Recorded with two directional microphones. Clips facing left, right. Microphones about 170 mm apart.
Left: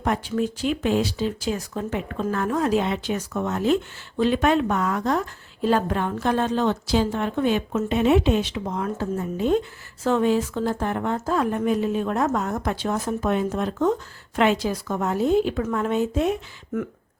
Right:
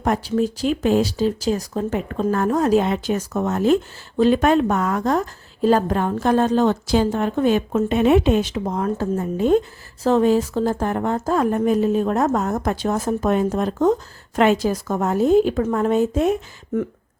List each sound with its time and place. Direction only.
0.0 s a woman's voice: 40° right (ahead or behind)
10.0 s a woman's voice: 35° right (ahead or behind)